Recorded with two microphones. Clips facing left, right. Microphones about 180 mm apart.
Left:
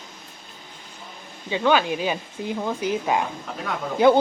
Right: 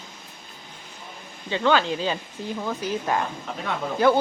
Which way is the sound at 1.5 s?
15° left (ahead or behind).